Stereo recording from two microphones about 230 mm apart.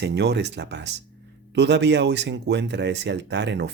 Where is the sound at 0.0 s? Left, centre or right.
Right.